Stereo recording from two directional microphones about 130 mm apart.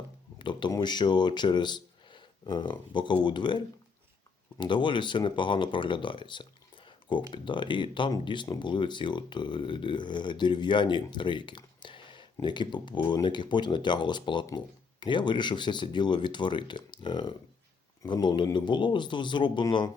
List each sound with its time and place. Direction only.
0.3 s speech: 35° left (ahead or behind)